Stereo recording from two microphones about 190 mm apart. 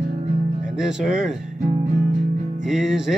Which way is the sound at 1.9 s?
45° right (ahead or behind).